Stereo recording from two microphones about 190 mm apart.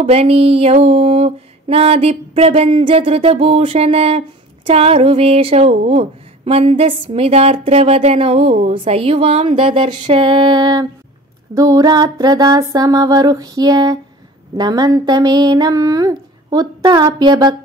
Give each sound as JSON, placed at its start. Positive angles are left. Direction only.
{"t": 0.0, "sound": "speech", "side_deg": -30}